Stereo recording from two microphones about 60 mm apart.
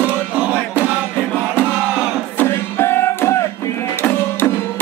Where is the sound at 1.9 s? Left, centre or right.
Centre.